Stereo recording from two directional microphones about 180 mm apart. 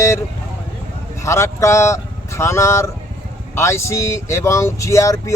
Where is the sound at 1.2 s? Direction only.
15° left (ahead or behind).